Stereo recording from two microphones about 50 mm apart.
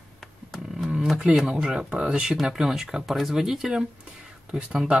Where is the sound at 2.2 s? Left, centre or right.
Centre.